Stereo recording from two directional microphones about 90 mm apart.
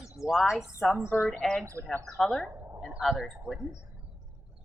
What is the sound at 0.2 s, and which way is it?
Speech, 5° right (ahead or behind).